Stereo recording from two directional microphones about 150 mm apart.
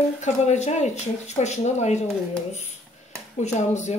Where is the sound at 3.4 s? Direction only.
50° left (ahead or behind).